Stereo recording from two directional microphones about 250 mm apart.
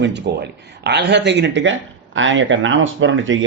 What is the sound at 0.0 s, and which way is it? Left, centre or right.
Speech, right.